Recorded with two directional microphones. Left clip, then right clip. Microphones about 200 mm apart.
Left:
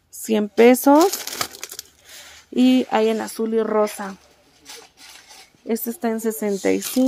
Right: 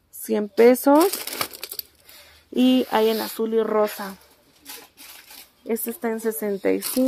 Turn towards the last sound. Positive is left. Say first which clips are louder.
# left 2 dB
turn(degrees=25)  # may be behind; listen again after turning